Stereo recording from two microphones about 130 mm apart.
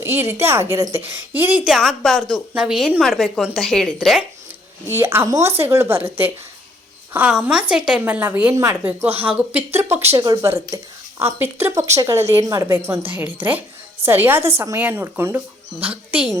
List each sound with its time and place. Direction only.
0.0 s speech: 20° right (ahead or behind)
1.7 s a woman's voice: centre (ahead or behind)
4.9 s speech: 20° right (ahead or behind)